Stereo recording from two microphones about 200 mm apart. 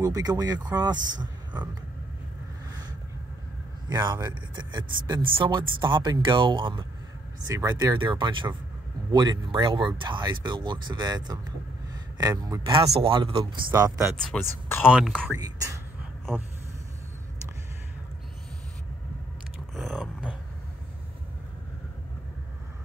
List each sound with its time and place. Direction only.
0.0 s speech: 20° right (ahead or behind)
3.9 s speech: 20° right (ahead or behind)
13.7 s speech: 15° right (ahead or behind)
14.3 s speech: 10° left (ahead or behind)
14.9 s speech: 5° right (ahead or behind)
15.3 s speech: 20° right (ahead or behind)
19.7 s a sound: centre (ahead or behind)